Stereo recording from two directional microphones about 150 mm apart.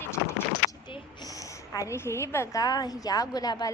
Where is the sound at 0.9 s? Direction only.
30° left (ahead or behind).